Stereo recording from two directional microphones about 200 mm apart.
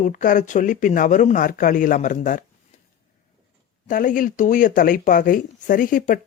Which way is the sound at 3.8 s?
40° left (ahead or behind).